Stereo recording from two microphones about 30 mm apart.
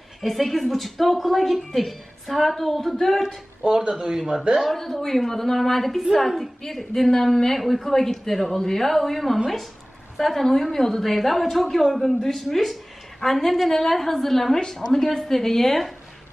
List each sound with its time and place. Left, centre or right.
0.2 s a woman's voice: centre
4.6 s a woman's voice: centre
6.1 s a woman's voice: centre
6.7 s a woman's voice: centre
7.1 s a woman's voice: centre
10.5 s a woman's voice: centre